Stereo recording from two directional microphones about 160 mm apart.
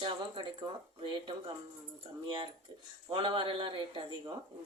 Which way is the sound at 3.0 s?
30° right (ahead or behind).